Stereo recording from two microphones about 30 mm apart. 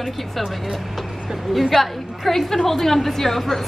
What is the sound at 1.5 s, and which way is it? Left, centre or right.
A woman's voice, centre.